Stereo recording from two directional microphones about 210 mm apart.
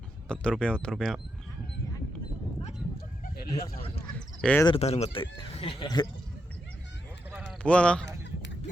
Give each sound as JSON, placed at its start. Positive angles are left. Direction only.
{"t": 0.3, "sound": "speech", "side_deg": 5}
{"t": 3.5, "sound": "speech", "side_deg": 30}
{"t": 4.1, "sound": "a sound", "side_deg": 5}
{"t": 4.6, "sound": "speech", "side_deg": 25}
{"t": 7.6, "sound": "speech", "side_deg": 5}